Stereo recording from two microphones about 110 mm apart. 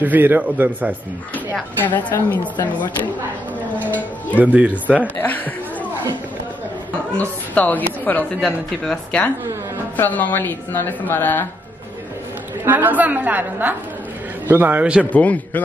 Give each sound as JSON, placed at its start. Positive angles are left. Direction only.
{"t": 0.0, "sound": "a woman's voice", "side_deg": -15}
{"t": 1.3, "sound": "a woman's voice", "side_deg": 15}
{"t": 3.8, "sound": "speech", "side_deg": 15}
{"t": 4.4, "sound": "a woman's voice", "side_deg": -10}
{"t": 5.0, "sound": "a woman's voice", "side_deg": 15}
{"t": 7.1, "sound": "a woman's voice", "side_deg": 10}
{"t": 8.4, "sound": "a woman's voice", "side_deg": 5}
{"t": 12.6, "sound": "a woman's voice", "side_deg": -15}
{"t": 15.1, "sound": "a woman's voice", "side_deg": 15}